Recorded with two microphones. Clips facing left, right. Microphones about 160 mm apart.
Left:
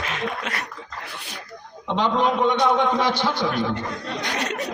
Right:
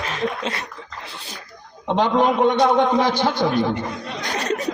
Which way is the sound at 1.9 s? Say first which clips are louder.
Right 3 dB; 50° right (ahead or behind).